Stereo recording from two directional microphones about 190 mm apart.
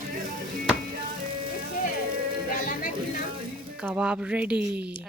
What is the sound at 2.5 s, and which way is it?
Speech, 45° left (ahead or behind).